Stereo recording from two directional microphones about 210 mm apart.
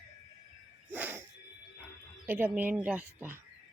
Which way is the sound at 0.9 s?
10° right (ahead or behind).